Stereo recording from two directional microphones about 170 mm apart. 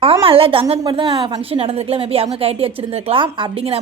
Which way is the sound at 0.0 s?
35° right (ahead or behind).